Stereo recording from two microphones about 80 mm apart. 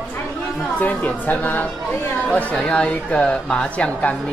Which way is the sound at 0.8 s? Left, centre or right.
Centre.